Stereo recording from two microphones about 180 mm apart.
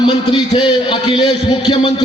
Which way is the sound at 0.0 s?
25° left (ahead or behind).